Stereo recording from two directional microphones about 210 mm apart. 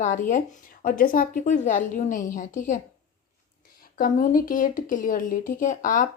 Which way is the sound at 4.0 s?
40° left (ahead or behind).